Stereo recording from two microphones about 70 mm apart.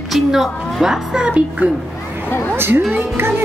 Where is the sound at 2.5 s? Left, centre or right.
Right.